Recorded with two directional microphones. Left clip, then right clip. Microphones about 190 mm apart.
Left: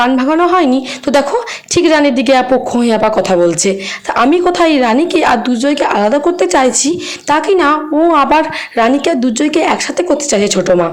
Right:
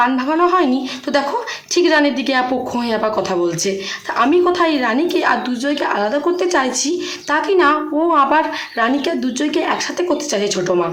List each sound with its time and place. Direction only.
0.0 s speech: 35° left (ahead or behind)